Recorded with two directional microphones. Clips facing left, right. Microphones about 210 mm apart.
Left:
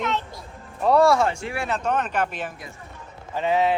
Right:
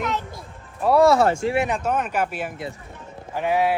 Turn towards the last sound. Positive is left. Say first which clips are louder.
# even
turn(degrees=-10)  # may be behind; listen again after turning